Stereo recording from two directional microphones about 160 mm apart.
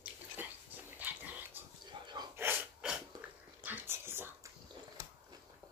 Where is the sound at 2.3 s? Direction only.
10° right (ahead or behind).